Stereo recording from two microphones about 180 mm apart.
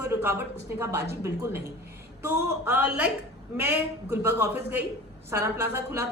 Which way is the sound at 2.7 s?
10° right (ahead or behind).